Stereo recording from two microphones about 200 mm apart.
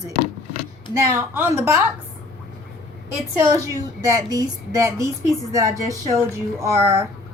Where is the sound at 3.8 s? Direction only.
15° right (ahead or behind).